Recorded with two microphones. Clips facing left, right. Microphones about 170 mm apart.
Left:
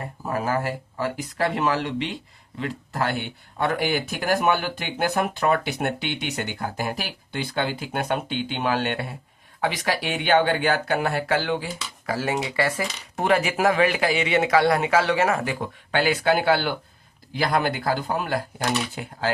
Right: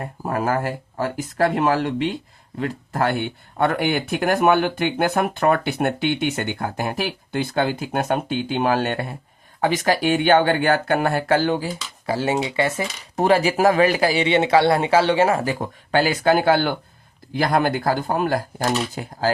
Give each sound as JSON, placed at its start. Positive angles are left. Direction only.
{"t": 0.2, "sound": "speech", "side_deg": -50}
{"t": 13.1, "sound": "a man's voice", "side_deg": -35}